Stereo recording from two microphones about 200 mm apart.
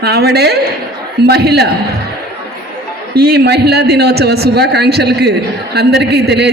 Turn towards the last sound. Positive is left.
turn(degrees=-55)  # may be behind; listen again after turning